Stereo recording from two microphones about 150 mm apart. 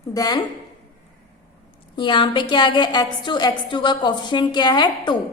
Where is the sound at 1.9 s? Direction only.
30° left (ahead or behind).